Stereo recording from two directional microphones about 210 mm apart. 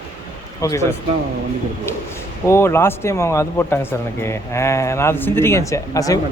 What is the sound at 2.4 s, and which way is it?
Speech, 10° left (ahead or behind).